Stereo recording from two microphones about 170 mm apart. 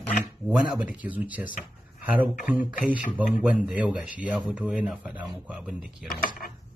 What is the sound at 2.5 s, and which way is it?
A man's voice, 10° right (ahead or behind).